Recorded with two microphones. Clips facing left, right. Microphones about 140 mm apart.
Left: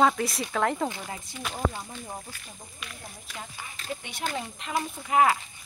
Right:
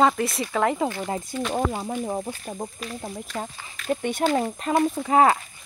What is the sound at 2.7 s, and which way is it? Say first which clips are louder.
Speech: right 11 dB; 40° right (ahead or behind).